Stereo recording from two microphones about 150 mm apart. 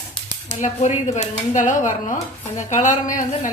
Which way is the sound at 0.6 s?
55° left (ahead or behind).